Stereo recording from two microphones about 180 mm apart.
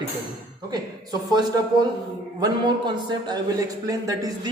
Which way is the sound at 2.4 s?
25° right (ahead or behind).